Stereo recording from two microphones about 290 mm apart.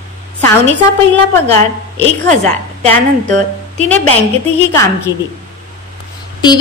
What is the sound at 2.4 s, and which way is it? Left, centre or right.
A woman's voice, right.